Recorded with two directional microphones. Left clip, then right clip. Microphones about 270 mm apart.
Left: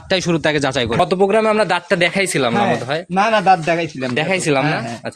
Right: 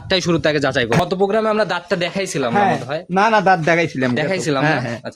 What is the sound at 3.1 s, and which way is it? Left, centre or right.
Speech, right.